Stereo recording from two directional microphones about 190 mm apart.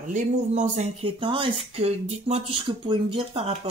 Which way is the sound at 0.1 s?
35° right (ahead or behind).